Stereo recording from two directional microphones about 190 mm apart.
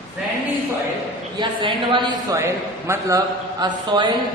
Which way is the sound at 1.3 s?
25° right (ahead or behind).